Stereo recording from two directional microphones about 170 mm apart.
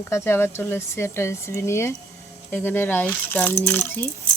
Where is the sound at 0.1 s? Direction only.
15° left (ahead or behind).